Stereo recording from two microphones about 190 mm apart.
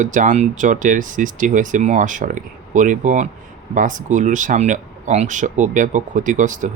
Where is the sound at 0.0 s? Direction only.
40° right (ahead or behind).